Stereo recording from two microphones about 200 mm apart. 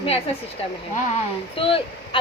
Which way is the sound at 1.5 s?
25° left (ahead or behind).